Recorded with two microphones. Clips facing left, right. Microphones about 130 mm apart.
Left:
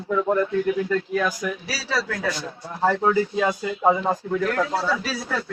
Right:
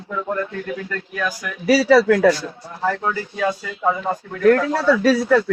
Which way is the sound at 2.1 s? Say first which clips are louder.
Right 13 dB; 90° right.